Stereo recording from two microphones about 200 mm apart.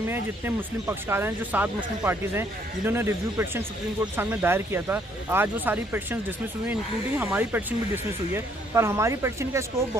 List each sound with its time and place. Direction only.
0.1 s speech: 10° right (ahead or behind)